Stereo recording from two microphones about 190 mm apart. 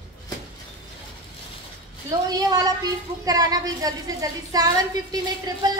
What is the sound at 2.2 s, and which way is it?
A woman's voice, 20° right (ahead or behind).